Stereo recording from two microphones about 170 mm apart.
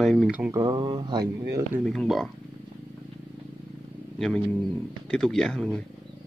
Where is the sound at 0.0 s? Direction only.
Centre (ahead or behind).